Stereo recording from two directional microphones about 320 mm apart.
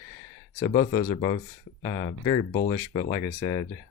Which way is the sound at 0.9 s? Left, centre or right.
Centre.